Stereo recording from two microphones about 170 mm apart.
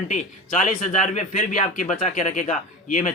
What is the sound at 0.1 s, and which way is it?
Speech, 45° left (ahead or behind).